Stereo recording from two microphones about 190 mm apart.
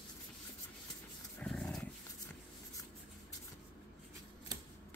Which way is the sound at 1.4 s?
5° left (ahead or behind).